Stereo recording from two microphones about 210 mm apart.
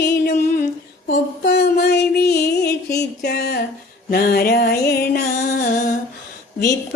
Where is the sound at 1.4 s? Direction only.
55° left (ahead or behind).